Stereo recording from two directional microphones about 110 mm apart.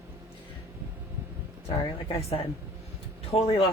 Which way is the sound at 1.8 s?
60° left (ahead or behind).